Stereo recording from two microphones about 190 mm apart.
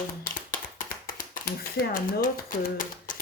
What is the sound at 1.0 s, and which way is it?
A woman's voice, 50° left (ahead or behind).